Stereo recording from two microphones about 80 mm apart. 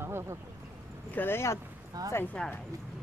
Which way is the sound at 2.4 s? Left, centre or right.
Centre.